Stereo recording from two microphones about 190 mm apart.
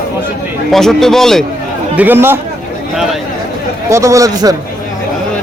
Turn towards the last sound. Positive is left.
turn(degrees=-20)  # may be behind; listen again after turning